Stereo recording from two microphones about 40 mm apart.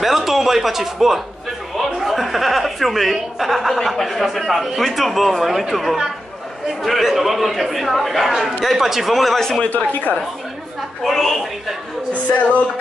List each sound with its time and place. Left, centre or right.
0.0 s a man's voice: centre
9.4 s speech: centre
9.7 s a woman's voice: left
11.1 s speech: centre